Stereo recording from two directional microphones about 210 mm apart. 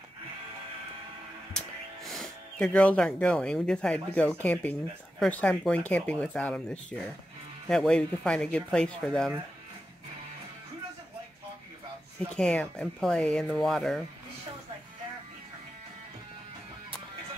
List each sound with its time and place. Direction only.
1.5 s speech: centre (ahead or behind)
12.3 s speech: 5° left (ahead or behind)